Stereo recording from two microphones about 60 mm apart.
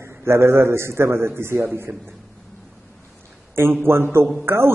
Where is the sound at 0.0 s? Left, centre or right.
Right.